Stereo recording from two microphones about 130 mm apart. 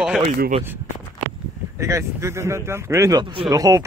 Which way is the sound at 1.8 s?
20° right (ahead or behind).